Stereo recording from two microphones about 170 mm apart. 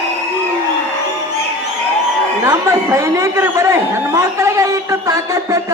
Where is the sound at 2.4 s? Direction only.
15° right (ahead or behind).